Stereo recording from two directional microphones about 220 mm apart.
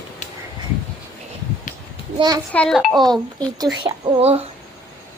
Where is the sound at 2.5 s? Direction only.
5° left (ahead or behind).